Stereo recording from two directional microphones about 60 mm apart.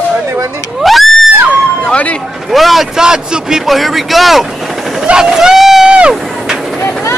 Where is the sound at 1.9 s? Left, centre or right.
Left.